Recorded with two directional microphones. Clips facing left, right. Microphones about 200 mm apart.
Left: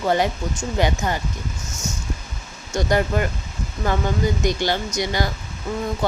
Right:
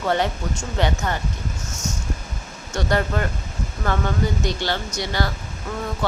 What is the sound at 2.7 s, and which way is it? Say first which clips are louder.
Speech: left 2 dB; 10° left (ahead or behind).